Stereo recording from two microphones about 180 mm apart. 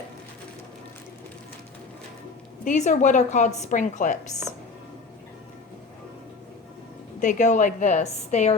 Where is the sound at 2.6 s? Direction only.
45° left (ahead or behind).